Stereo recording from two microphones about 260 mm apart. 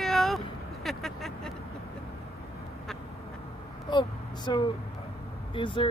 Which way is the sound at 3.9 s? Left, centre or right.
Centre.